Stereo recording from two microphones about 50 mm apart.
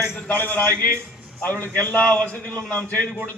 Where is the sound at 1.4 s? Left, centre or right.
Left.